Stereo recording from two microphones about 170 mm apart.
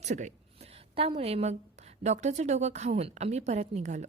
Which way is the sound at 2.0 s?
40° right (ahead or behind).